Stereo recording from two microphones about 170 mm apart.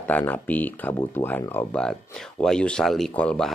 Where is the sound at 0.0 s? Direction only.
10° left (ahead or behind).